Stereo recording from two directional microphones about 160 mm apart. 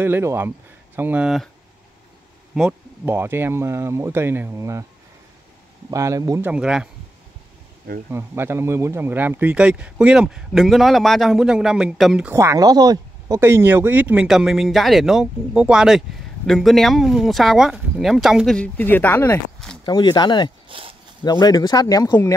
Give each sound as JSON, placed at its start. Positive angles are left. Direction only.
{"t": 0.0, "sound": "speech", "side_deg": -15}
{"t": 2.5, "sound": "speech", "side_deg": -5}
{"t": 5.9, "sound": "speech", "side_deg": -20}
{"t": 6.4, "sound": "speech", "side_deg": -5}
{"t": 8.1, "sound": "speech", "side_deg": -15}
{"t": 12.3, "sound": "speech", "side_deg": -15}
{"t": 19.8, "sound": "speech", "side_deg": 30}
{"t": 20.6, "sound": "a sound", "side_deg": -35}
{"t": 21.2, "sound": "speech", "side_deg": 25}